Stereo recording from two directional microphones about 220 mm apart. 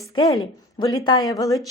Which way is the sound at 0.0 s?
15° left (ahead or behind).